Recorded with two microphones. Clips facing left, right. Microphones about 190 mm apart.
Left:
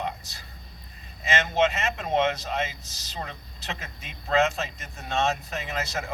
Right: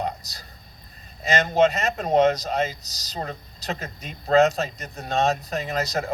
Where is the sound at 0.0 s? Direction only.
40° right (ahead or behind).